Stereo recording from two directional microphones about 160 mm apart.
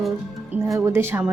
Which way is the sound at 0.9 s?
15° right (ahead or behind).